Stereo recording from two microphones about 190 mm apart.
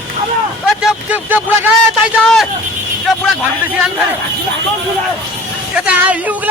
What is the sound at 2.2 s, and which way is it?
Speech, centre (ahead or behind).